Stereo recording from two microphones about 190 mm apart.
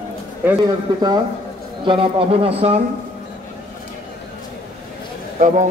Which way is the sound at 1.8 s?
30° right (ahead or behind).